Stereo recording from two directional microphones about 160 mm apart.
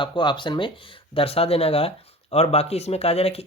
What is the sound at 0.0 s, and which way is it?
Speech, 30° left (ahead or behind).